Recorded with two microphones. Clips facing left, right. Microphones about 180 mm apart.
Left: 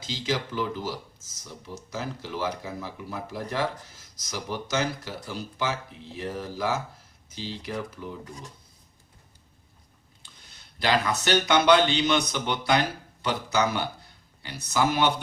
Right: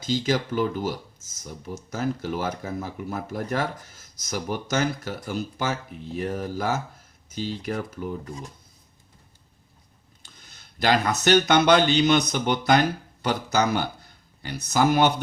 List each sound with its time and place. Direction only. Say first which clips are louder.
0.0 s speech: right 5 dB; 45° right (ahead or behind)
10.2 s speech: right 2 dB; 45° right (ahead or behind)